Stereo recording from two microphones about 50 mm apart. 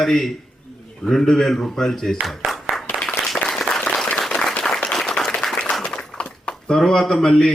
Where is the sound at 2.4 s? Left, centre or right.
Centre.